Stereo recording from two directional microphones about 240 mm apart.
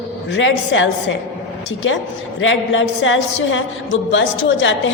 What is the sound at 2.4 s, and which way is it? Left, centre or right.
A man's voice, left.